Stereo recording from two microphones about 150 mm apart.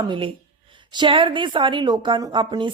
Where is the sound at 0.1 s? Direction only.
35° right (ahead or behind).